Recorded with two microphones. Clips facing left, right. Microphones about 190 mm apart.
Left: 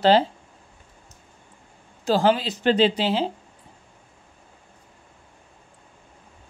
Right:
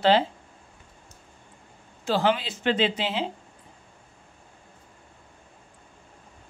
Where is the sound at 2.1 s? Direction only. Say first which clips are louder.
Left 4 dB; 40° left (ahead or behind).